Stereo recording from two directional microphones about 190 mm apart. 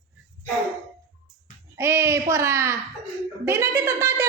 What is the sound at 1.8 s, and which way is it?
A child's voice, 15° right (ahead or behind).